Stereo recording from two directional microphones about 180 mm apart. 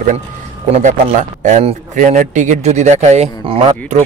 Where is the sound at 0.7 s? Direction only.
40° right (ahead or behind).